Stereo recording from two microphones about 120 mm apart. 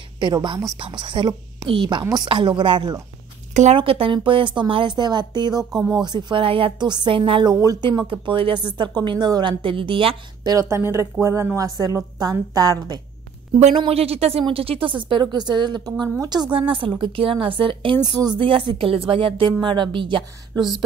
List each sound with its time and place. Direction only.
0.2 s speech: 40° right (ahead or behind)
7.6 s speech: 35° right (ahead or behind)
10.5 s a woman's voice: 25° right (ahead or behind)
13.6 s speech: 65° right (ahead or behind); by 16.4 s 35° right (ahead or behind)
16.5 s speech: 45° right (ahead or behind)
18.0 s speech: 35° right (ahead or behind)